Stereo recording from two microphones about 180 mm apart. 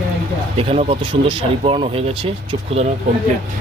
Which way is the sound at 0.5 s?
30° right (ahead or behind).